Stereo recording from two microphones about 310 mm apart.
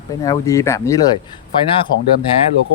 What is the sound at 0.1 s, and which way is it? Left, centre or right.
Speech, centre.